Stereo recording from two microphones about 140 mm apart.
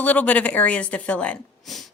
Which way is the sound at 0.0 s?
10° left (ahead or behind).